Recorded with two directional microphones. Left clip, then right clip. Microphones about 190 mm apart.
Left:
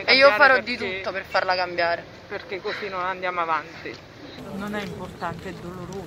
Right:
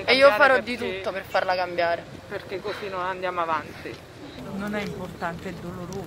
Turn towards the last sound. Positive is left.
turn(degrees=-10)  # may be behind; listen again after turning